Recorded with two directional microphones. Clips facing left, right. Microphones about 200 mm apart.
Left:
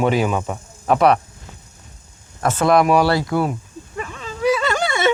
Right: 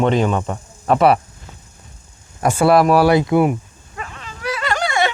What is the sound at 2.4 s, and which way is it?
Speech, 10° right (ahead or behind).